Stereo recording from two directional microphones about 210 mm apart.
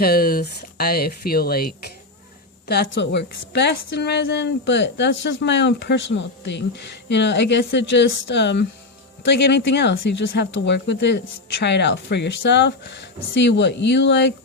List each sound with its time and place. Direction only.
0.0 s a woman's voice: 45° left (ahead or behind)